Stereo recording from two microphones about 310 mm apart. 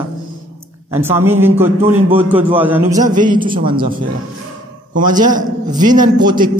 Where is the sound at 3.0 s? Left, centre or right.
Right.